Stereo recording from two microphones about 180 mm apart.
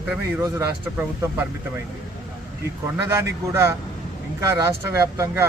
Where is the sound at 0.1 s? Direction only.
15° right (ahead or behind).